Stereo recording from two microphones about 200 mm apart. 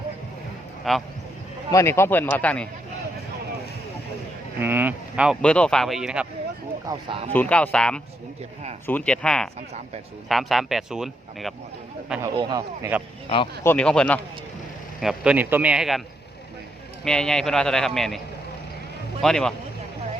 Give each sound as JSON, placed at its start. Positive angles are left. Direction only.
{"t": 0.9, "sound": "speech", "side_deg": 0}
{"t": 1.7, "sound": "speech", "side_deg": 15}
{"t": 4.6, "sound": "speech", "side_deg": -10}
{"t": 6.8, "sound": "speech", "side_deg": -25}
{"t": 7.3, "sound": "speech", "side_deg": 5}
{"t": 12.2, "sound": "speech", "side_deg": -20}
{"t": 13.7, "sound": "speech", "side_deg": 5}
{"t": 17.0, "sound": "speech", "side_deg": 5}
{"t": 19.2, "sound": "speech", "side_deg": 0}